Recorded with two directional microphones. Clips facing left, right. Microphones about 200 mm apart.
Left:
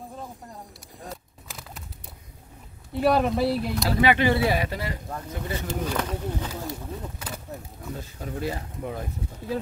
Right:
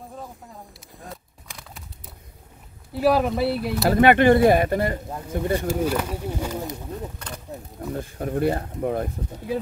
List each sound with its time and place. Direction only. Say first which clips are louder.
1.0 s a sound: left 1 dB; centre (ahead or behind)
2.9 s speech: right 2 dB; centre (ahead or behind)
3.8 s speech: right 7 dB; 55° right (ahead or behind)
5.7 s speech: right 5 dB; 10° right (ahead or behind)
7.9 s speech: right 7 dB; 55° right (ahead or behind)